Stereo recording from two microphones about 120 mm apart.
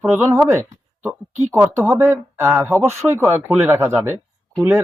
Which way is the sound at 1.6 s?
20° right (ahead or behind).